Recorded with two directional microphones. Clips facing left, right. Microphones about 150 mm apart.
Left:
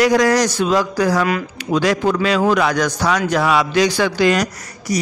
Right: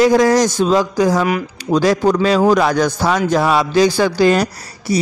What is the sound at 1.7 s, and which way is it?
A man's voice, 35° right (ahead or behind).